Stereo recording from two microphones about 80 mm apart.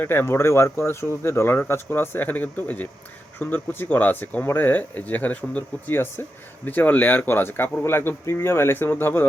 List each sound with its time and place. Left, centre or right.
0.0 s speech: left